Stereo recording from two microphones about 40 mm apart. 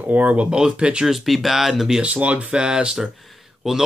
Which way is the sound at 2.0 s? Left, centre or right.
Right.